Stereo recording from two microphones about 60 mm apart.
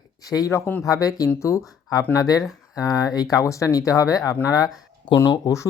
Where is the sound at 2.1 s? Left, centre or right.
Left.